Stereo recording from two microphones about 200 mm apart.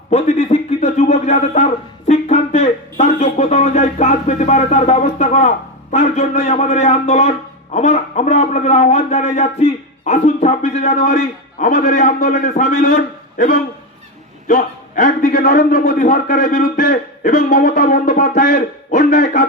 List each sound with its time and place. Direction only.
0.1 s a man's voice: 35° left (ahead or behind)